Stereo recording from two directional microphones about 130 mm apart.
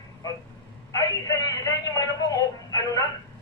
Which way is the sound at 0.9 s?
25° left (ahead or behind).